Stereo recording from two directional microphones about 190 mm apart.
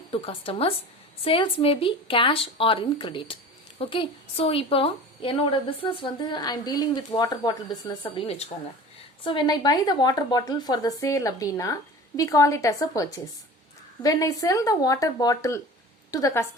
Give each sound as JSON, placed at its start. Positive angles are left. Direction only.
{"t": 0.1, "sound": "a woman's voice", "side_deg": 30}